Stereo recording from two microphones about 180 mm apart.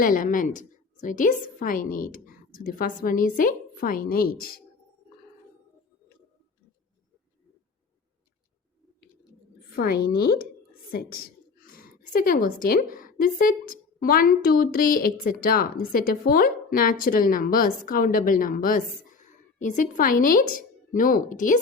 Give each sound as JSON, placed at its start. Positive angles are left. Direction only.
{"t": 0.0, "sound": "speech", "side_deg": 50}
{"t": 9.7, "sound": "a woman's voice", "side_deg": 55}